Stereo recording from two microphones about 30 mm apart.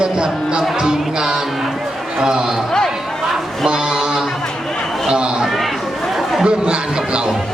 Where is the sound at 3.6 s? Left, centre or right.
Right.